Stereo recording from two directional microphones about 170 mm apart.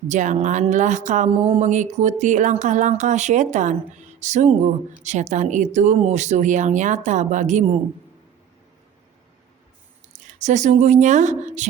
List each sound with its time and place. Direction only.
0.1 s a woman's voice: 45° right (ahead or behind)
10.1 s speech: 45° right (ahead or behind)